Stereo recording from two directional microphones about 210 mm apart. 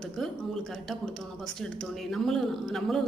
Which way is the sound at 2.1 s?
Centre (ahead or behind).